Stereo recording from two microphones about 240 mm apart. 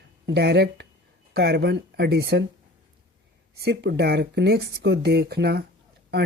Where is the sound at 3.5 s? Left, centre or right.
Right.